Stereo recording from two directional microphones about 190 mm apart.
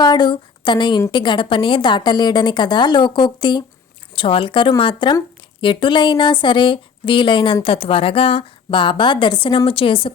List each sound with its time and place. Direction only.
0.0 s speech: 25° left (ahead or behind)